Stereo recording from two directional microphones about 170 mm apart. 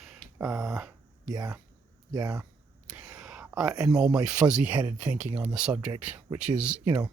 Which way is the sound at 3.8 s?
5° right (ahead or behind).